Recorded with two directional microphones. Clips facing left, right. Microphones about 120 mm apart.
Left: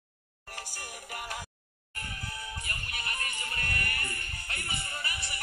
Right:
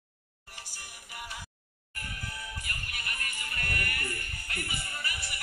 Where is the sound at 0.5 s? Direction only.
50° left (ahead or behind).